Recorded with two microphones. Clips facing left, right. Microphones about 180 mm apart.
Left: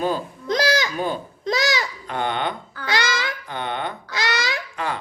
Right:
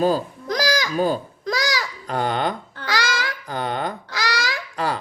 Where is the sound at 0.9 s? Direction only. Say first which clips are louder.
Right 4 dB; 40° right (ahead or behind).